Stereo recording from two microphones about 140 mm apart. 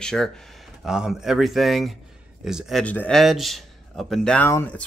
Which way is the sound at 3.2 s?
Centre (ahead or behind).